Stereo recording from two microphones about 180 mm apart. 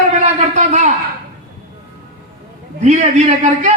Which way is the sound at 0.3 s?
40° right (ahead or behind).